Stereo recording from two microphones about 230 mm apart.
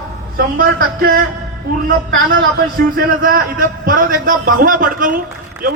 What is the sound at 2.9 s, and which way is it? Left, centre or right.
A man's voice, right.